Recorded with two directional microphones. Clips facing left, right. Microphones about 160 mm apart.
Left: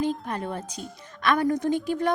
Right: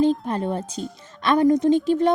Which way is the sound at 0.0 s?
30° right (ahead or behind).